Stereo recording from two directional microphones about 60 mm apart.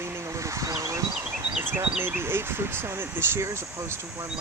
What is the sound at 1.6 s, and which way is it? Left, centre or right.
Speech, right.